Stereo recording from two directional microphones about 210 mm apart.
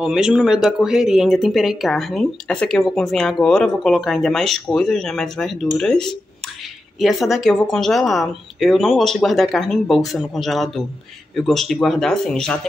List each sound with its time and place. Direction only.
0.0 s speech: 5° right (ahead or behind)
7.2 s speech: centre (ahead or behind)